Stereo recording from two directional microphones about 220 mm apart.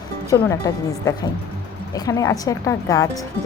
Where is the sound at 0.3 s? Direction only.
15° left (ahead or behind).